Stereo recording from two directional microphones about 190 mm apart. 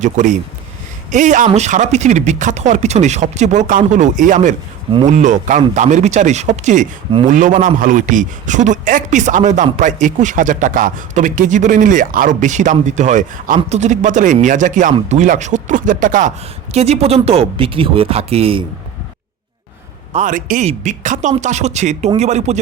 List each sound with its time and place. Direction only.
0.0 s a man's voice: 40° right (ahead or behind)
16.7 s speech: 35° right (ahead or behind)
20.1 s speech: 45° right (ahead or behind)